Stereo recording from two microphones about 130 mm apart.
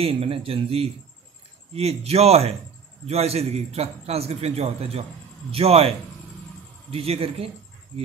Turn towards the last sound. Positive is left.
turn(degrees=-50)  # may be behind; listen again after turning